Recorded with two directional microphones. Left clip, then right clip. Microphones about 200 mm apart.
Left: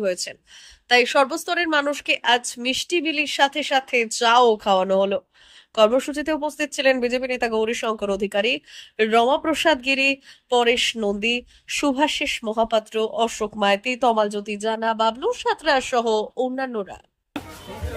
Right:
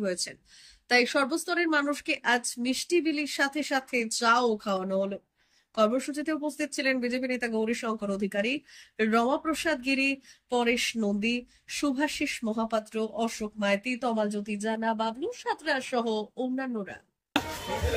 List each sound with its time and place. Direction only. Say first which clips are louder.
0.0 s speech: left 7 dB; 15° left (ahead or behind)